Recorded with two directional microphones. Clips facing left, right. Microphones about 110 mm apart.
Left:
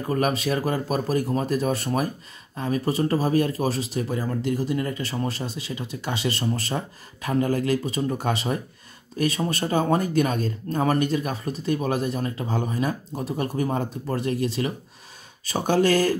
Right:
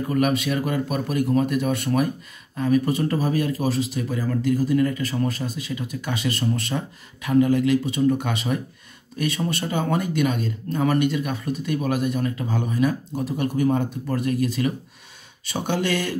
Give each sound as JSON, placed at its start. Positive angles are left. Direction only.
{"t": 0.1, "sound": "speech", "side_deg": 35}
{"t": 15.4, "sound": "speech", "side_deg": 40}